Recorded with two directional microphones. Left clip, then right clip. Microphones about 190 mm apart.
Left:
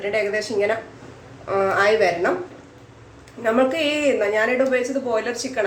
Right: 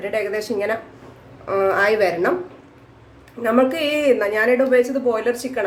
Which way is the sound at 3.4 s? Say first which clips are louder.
Right 1 dB; 35° right (ahead or behind).